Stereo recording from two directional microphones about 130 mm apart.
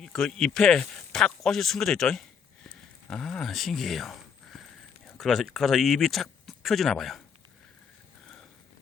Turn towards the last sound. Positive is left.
turn(degrees=0)  # may be behind; listen again after turning